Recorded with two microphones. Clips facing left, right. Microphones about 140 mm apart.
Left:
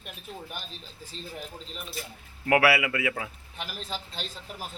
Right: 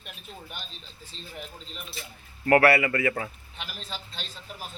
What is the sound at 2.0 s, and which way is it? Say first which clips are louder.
Speech: left 5 dB; 45° left (ahead or behind).